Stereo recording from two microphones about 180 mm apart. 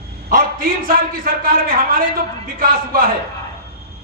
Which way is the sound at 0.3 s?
50° right (ahead or behind).